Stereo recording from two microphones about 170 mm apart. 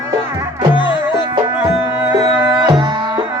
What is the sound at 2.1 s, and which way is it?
Music, 20° right (ahead or behind).